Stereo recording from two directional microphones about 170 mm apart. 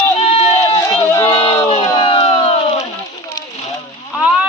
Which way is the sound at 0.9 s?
15° left (ahead or behind).